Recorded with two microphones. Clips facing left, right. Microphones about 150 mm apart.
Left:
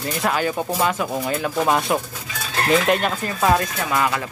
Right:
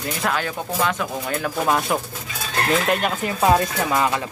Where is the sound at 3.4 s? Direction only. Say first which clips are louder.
Right 1 dB; 25° right (ahead or behind).